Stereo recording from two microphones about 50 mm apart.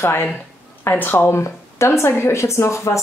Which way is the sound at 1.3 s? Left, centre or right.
Left.